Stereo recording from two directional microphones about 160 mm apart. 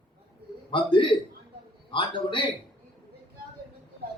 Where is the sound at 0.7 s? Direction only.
30° left (ahead or behind).